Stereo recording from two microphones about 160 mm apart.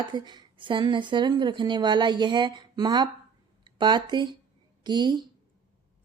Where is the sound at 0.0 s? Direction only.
30° right (ahead or behind).